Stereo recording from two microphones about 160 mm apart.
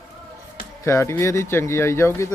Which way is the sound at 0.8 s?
15° left (ahead or behind).